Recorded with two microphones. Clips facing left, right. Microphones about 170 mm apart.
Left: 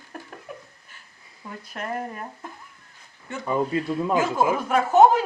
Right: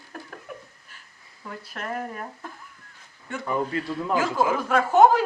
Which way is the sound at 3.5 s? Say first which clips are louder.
Left 3 dB; 20° left (ahead or behind).